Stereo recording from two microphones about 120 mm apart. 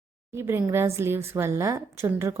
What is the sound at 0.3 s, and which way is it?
A woman's voice, 20° right (ahead or behind).